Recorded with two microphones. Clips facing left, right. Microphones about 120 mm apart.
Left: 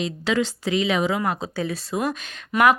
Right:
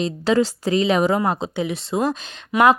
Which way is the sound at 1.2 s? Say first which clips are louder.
Right 3 dB; 25° right (ahead or behind).